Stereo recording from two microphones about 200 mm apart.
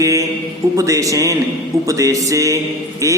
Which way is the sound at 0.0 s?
15° right (ahead or behind).